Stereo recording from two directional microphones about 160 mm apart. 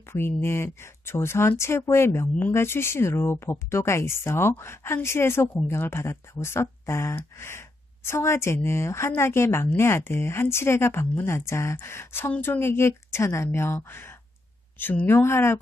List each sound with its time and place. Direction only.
0.1 s speech: 15° left (ahead or behind)